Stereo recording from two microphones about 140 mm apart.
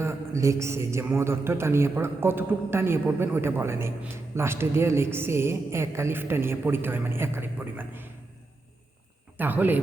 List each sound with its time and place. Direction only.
0.0 s a man's voice: 20° right (ahead or behind)
9.4 s a man's voice: 15° right (ahead or behind)